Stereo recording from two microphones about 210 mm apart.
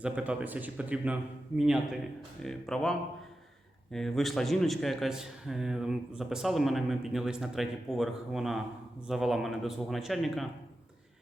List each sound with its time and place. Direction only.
0.0 s a man's voice: 5° right (ahead or behind)
3.9 s a man's voice: centre (ahead or behind)